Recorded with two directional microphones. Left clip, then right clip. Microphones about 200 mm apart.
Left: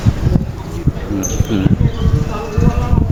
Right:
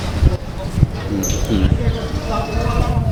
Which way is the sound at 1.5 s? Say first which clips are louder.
Left 2 dB; 15° left (ahead or behind).